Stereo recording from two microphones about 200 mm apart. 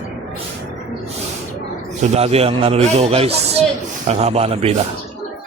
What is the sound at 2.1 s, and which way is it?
A man's voice, 30° right (ahead or behind).